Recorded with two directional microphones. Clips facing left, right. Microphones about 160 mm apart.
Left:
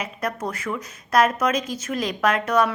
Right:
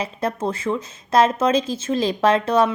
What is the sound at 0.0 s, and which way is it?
Speech, 25° right (ahead or behind).